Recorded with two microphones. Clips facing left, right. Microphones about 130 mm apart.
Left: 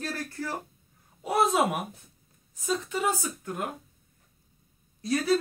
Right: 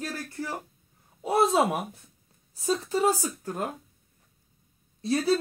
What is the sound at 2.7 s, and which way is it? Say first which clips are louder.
A woman's voice: right 4 dB; 35° right (ahead or behind).